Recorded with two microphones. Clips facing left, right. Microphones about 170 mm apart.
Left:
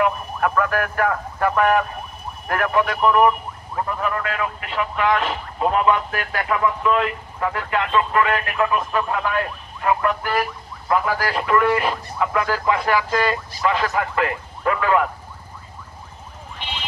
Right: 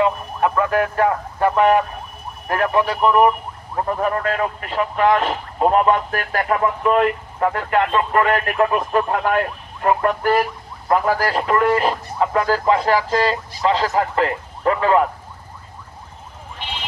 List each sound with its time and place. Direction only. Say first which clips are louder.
0.0 s speech: right 2 dB; 25° right (ahead or behind)
3.8 s speech: right 4 dB; 35° right (ahead or behind)